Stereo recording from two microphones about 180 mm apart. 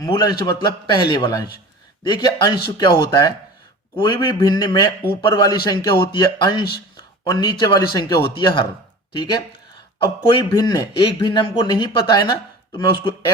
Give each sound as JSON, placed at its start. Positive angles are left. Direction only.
{"t": 0.0, "sound": "speech", "side_deg": 20}
{"t": 6.9, "sound": "a sound", "side_deg": 20}
{"t": 7.6, "sound": "speech", "side_deg": 25}